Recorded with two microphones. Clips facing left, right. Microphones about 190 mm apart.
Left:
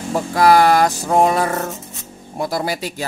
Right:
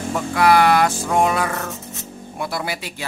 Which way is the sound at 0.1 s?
40° left (ahead or behind).